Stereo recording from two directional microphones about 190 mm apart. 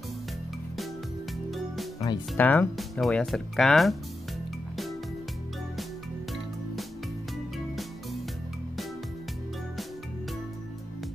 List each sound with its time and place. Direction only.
2.0 s speech: 15° left (ahead or behind)
7.5 s music: centre (ahead or behind)